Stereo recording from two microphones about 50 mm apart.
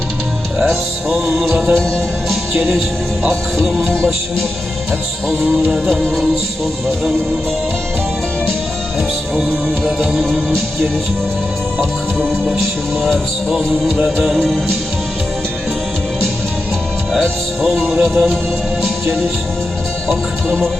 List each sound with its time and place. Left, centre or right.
0.7 s music: centre
1.5 s speech: right
9.0 s music: right
17.8 s speech: right
20.1 s music: centre